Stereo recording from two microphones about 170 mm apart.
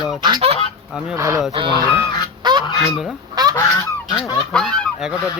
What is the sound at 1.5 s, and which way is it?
Speech, 30° right (ahead or behind).